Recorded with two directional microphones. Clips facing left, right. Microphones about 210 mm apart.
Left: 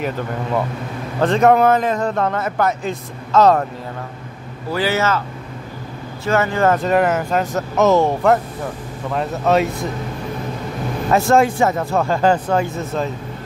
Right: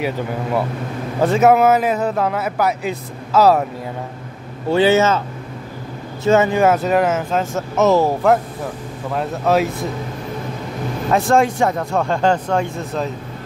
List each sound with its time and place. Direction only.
0.0 s a man's voice: 10° right (ahead or behind)
4.6 s speech: 25° right (ahead or behind)
6.2 s a man's voice: 20° right (ahead or behind); by 9.7 s centre (ahead or behind)
11.1 s a man's voice: centre (ahead or behind)